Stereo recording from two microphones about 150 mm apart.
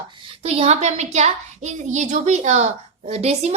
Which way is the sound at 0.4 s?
40° right (ahead or behind).